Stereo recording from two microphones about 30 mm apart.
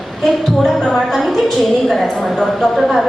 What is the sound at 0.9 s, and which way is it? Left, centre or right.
A woman's voice, centre.